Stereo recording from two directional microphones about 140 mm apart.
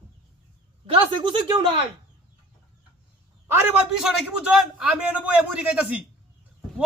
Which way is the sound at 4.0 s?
5° right (ahead or behind).